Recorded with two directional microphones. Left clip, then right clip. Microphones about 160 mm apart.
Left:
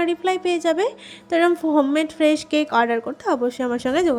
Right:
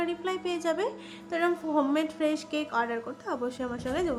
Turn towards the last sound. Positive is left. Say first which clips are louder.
# left 11 dB
turn(degrees=45)  # may be behind; listen again after turning